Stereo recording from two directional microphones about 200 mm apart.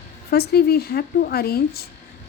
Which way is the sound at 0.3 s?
50° left (ahead or behind).